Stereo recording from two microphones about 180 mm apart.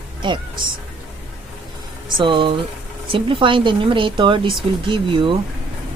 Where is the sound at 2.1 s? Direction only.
30° right (ahead or behind).